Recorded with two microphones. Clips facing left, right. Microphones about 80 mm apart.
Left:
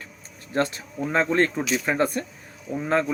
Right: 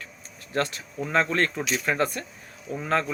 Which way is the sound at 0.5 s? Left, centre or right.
Left.